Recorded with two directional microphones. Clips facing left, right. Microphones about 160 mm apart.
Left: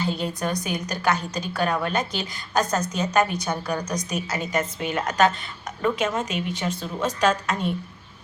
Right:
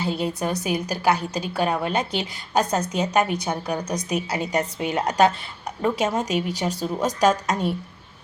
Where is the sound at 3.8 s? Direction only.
30° right (ahead or behind).